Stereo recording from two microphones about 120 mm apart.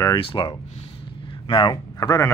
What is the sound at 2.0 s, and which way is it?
Speech, 25° left (ahead or behind).